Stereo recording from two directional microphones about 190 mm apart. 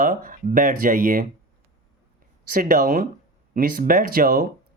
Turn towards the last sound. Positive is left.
turn(degrees=-50)  # may be behind; listen again after turning